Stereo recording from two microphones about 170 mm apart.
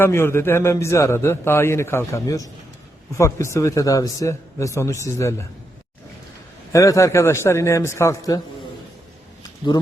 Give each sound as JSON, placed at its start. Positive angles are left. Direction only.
{"t": 0.0, "sound": "a man's voice", "side_deg": 15}
{"t": 6.7, "sound": "a man's voice", "side_deg": 20}